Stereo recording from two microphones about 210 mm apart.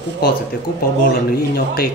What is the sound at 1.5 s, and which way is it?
Speech, 45° left (ahead or behind).